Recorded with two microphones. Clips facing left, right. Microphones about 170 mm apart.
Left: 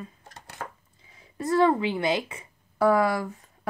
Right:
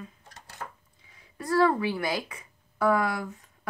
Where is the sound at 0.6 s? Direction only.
80° left.